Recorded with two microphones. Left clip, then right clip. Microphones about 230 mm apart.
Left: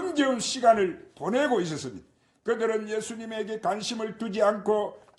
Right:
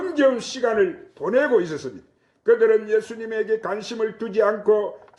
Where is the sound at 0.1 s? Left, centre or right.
Left.